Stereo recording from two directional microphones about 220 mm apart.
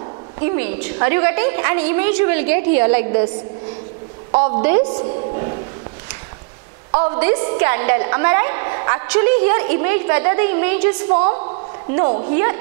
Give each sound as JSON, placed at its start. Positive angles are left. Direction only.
{"t": 0.5, "sound": "a woman's voice", "side_deg": -10}
{"t": 4.3, "sound": "a woman's voice", "side_deg": -25}
{"t": 5.3, "sound": "music", "side_deg": -35}
{"t": 6.9, "sound": "a woman's voice", "side_deg": -25}
{"t": 7.2, "sound": "a woman's voice", "side_deg": -15}
{"t": 11.1, "sound": "a woman's voice", "side_deg": -30}